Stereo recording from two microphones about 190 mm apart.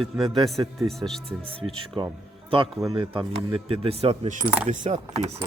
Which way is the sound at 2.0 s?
25° right (ahead or behind).